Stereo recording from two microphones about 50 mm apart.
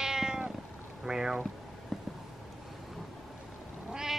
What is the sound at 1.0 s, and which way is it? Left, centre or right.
Speech, centre.